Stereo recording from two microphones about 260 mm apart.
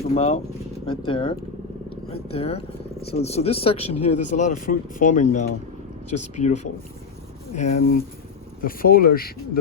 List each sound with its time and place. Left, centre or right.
0.1 s speech: left
4.1 s speech: left
4.4 s speech: left